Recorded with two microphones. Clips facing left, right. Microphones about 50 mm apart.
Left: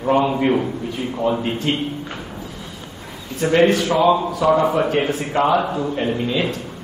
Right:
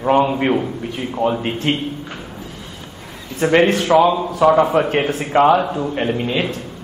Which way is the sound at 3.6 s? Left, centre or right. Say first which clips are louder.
Left 1 dB; right.